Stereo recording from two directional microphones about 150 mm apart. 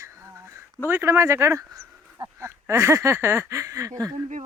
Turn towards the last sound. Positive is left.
turn(degrees=-20)  # may be behind; listen again after turning